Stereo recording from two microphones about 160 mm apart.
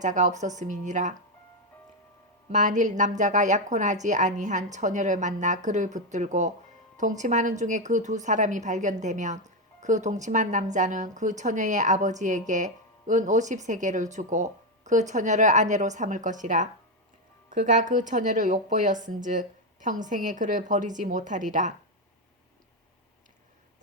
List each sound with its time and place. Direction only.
0.0 s a woman's voice: 50° right (ahead or behind)
2.5 s a woman's voice: 50° right (ahead or behind)